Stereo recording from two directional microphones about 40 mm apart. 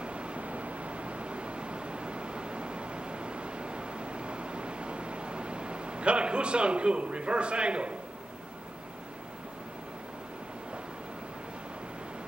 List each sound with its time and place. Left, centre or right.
0.0 s vehicle: right